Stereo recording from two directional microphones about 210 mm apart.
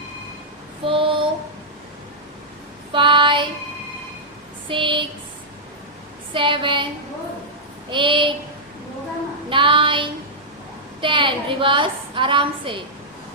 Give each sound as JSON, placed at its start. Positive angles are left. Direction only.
{"t": 0.9, "sound": "child singing", "side_deg": -25}
{"t": 2.9, "sound": "female singing", "side_deg": -25}
{"t": 4.7, "sound": "a woman's voice", "side_deg": -25}
{"t": 6.3, "sound": "a woman's voice", "side_deg": -25}
{"t": 7.9, "sound": "a woman's voice", "side_deg": -25}
{"t": 9.5, "sound": "child singing", "side_deg": -25}
{"t": 11.0, "sound": "a sound", "side_deg": -25}